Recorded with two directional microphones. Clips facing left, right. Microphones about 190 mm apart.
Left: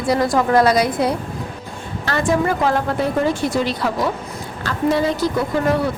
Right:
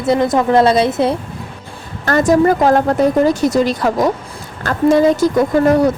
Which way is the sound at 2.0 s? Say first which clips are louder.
Right 7 dB; 45° right (ahead or behind).